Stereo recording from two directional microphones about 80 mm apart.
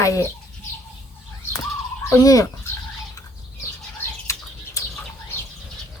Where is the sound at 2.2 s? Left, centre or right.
Left.